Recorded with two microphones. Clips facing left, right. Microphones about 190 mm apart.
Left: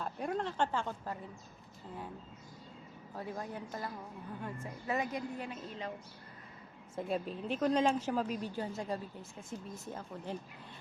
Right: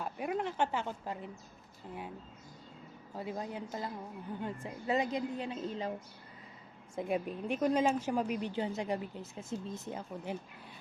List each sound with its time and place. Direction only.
0.0 s a woman's voice: 5° right (ahead or behind)
3.2 s a woman's voice: 20° right (ahead or behind)
5.5 s a woman's voice: 35° right (ahead or behind)
6.9 s a woman's voice: 15° right (ahead or behind)